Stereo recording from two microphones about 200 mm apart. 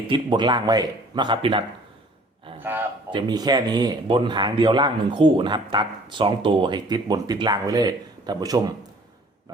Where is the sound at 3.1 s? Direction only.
20° right (ahead or behind).